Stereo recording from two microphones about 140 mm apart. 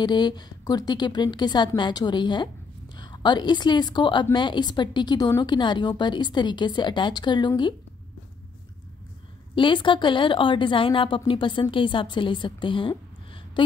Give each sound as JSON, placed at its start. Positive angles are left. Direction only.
{"t": 0.0, "sound": "a woman's voice", "side_deg": 30}
{"t": 9.6, "sound": "a woman's voice", "side_deg": 35}